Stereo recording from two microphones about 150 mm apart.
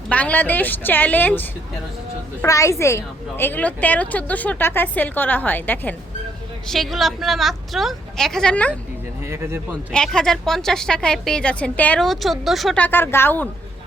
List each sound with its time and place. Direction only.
0.1 s a woman's voice: 10° left (ahead or behind)
6.7 s a woman's voice: centre (ahead or behind)
9.2 s speech: 15° right (ahead or behind)
9.9 s a woman's voice: 5° left (ahead or behind)
12.8 s a woman's voice: 15° left (ahead or behind)